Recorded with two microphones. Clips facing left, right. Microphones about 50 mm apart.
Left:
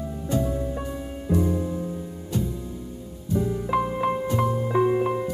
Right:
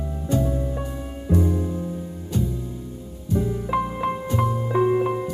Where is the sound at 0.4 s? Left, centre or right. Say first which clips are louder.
Right 1 dB; centre.